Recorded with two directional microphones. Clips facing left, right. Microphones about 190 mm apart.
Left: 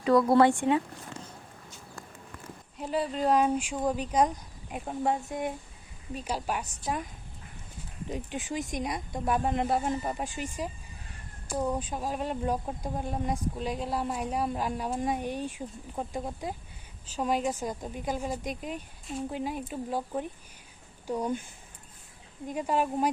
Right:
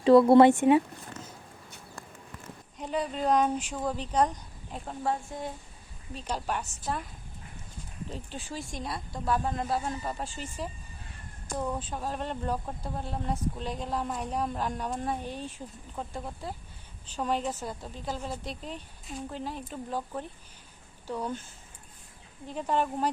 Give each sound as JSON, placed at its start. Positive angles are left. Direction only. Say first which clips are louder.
{"t": 0.0, "sound": "speech", "louder": "right 4 dB", "side_deg": -25}
{"t": 2.7, "sound": "speech", "louder": "left 1 dB", "side_deg": 5}
{"t": 8.1, "sound": "speech", "louder": "left 6 dB", "side_deg": 15}
{"t": 22.4, "sound": "speech", "louder": "left 1 dB", "side_deg": 10}